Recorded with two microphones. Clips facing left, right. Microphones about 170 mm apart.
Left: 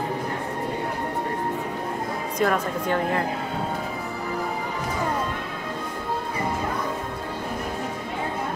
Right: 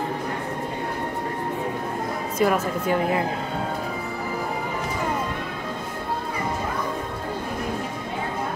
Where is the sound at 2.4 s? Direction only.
5° right (ahead or behind).